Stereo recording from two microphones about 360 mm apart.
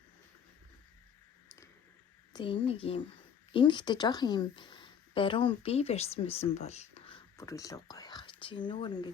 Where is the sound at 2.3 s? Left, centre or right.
Centre.